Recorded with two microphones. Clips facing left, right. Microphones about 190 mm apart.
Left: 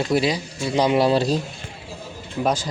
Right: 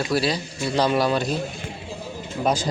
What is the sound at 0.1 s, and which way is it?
Speech, 15° left (ahead or behind).